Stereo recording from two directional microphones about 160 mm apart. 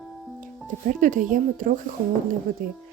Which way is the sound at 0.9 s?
55° right (ahead or behind).